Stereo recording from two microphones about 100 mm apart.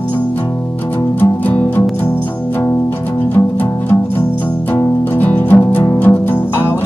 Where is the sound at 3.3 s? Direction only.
20° left (ahead or behind).